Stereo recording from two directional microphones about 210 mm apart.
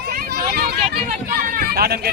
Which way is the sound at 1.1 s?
45° right (ahead or behind).